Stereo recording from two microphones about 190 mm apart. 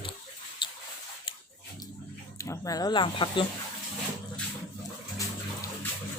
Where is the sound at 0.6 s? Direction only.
25° left (ahead or behind).